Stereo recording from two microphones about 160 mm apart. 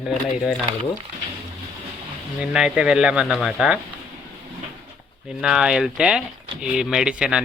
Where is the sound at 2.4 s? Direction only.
5° right (ahead or behind).